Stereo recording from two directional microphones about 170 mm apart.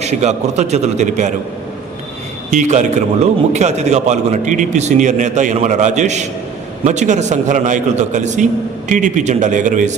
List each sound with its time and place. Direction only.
0.0 s a man's voice: 40° right (ahead or behind)
2.5 s a man's voice: 45° right (ahead or behind)